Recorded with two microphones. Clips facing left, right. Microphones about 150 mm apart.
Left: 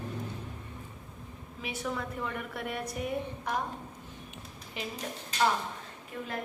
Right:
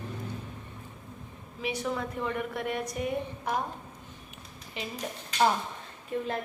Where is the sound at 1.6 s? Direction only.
Centre (ahead or behind).